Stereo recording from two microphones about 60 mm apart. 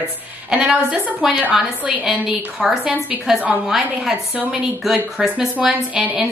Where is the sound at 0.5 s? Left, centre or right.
Centre.